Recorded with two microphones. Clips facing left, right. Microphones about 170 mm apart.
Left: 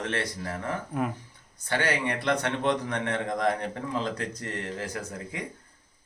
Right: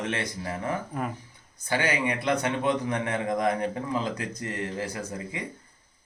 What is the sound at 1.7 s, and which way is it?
A man's voice, 10° right (ahead or behind).